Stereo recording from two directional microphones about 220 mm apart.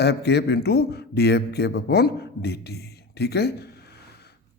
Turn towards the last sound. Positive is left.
turn(degrees=45)  # may be behind; listen again after turning